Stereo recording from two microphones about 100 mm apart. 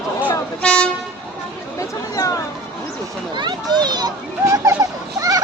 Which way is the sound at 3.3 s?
45° right (ahead or behind).